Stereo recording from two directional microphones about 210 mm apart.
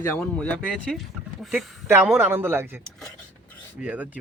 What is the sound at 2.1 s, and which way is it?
Speech, 10° right (ahead or behind).